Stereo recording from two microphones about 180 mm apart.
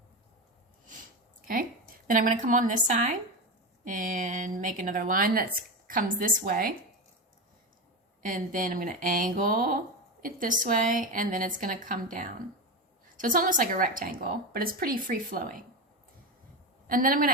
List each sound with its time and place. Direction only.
2.0 s a woman's voice: 50° right (ahead or behind)
8.2 s a woman's voice: 50° right (ahead or behind)
16.8 s a woman's voice: 50° right (ahead or behind)